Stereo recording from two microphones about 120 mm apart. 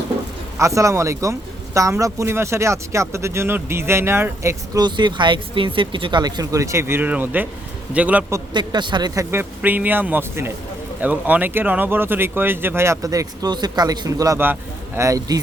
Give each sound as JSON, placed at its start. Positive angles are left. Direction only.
{"t": 0.6, "sound": "speech", "side_deg": -25}
{"t": 4.8, "sound": "speech", "side_deg": -40}
{"t": 8.5, "sound": "speech", "side_deg": -40}
{"t": 9.3, "sound": "speech", "side_deg": -15}